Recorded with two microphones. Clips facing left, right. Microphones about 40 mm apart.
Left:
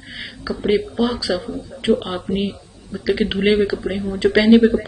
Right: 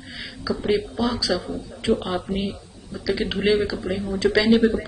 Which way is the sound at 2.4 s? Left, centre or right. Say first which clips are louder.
Left 4 dB; left.